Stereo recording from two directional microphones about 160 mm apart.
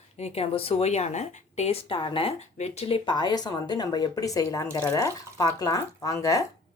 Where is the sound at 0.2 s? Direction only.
40° left (ahead or behind); by 6.4 s 20° left (ahead or behind).